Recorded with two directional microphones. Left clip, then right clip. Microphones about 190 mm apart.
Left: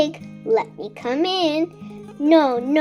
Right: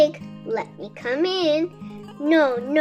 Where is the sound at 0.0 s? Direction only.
35° left (ahead or behind).